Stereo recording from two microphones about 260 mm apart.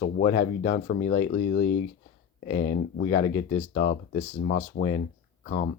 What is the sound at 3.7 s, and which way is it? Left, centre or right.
Speech, left.